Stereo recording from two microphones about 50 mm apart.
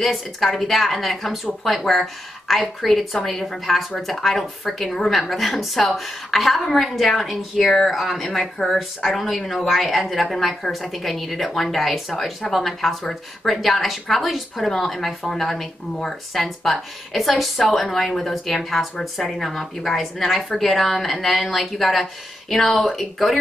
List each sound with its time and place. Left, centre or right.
0.0 s a woman's voice: centre